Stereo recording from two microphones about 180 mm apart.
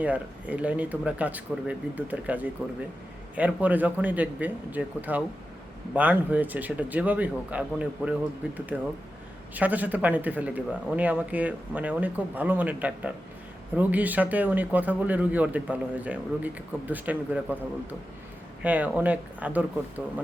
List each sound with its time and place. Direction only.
0.0 s speech: 10° right (ahead or behind)
18.6 s speech: 10° right (ahead or behind)